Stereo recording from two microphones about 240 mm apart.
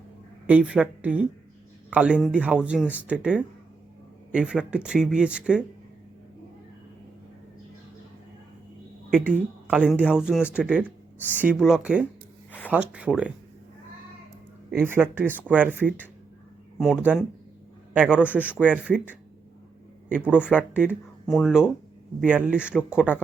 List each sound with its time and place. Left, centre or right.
0.4 s speech: centre
9.0 s speech: centre
11.2 s speech: centre
11.6 s speech: centre
12.5 s a sound: centre
12.7 s speech: centre
14.7 s speech: centre
20.1 s speech: centre